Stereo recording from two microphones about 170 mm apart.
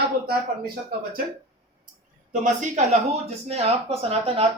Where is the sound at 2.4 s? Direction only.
45° right (ahead or behind).